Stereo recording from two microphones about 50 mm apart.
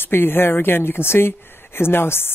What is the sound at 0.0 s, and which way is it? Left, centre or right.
Speech, left.